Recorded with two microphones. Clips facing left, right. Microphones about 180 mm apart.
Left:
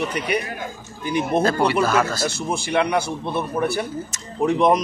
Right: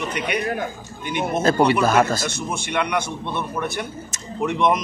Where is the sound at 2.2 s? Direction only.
30° left (ahead or behind).